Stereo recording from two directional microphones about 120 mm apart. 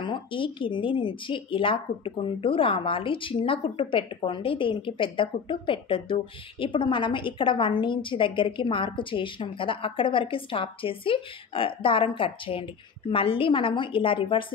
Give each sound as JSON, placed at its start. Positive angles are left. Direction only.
{"t": 0.0, "sound": "a woman's voice", "side_deg": 45}